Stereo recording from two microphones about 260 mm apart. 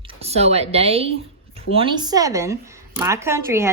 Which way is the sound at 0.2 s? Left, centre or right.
Right.